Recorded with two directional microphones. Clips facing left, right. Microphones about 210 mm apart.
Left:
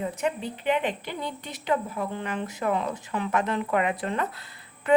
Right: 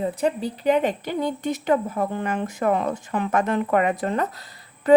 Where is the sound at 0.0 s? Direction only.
35° right (ahead or behind).